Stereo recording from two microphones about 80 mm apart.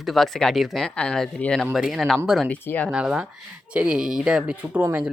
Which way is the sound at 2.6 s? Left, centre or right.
Left.